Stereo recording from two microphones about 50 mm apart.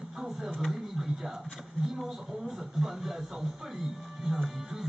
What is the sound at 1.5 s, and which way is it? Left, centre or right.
Television, centre.